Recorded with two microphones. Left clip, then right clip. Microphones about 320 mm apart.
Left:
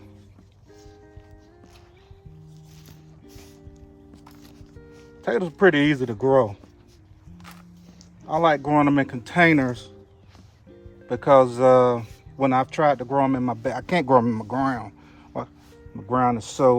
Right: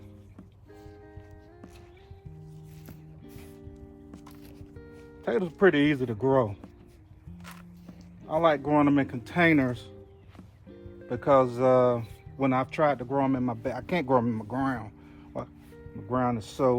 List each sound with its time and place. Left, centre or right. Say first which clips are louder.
4.1 s music: left 1 dB; centre
5.2 s speech: left 4 dB; left
8.3 s speech: left 4 dB; left
11.1 s speech: left 6 dB; left